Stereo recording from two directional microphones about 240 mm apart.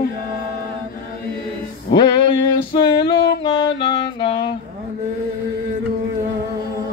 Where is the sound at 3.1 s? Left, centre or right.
Left.